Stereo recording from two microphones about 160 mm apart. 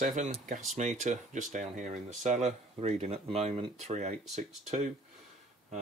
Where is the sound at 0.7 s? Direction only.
45° right (ahead or behind).